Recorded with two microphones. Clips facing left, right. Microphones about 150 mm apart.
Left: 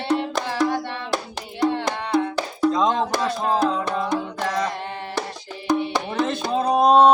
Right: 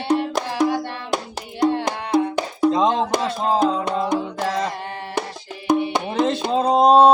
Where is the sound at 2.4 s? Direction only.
20° right (ahead or behind).